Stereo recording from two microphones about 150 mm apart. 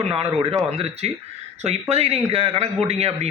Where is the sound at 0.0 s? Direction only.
40° right (ahead or behind).